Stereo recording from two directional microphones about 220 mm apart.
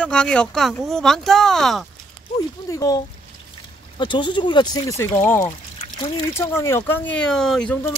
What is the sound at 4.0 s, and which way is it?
Speech, 20° left (ahead or behind).